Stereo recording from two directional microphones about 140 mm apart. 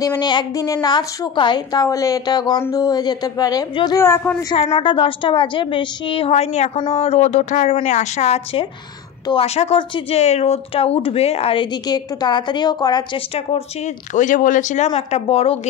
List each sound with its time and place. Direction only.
0.2 s a woman's voice: 30° left (ahead or behind)
14.1 s speech: 65° left (ahead or behind)
15.0 s a woman's voice: 50° left (ahead or behind)